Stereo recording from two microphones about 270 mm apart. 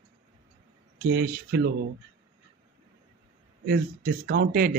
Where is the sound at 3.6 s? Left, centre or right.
Right.